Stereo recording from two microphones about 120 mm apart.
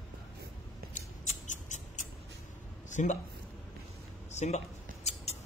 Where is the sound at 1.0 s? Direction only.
90° left.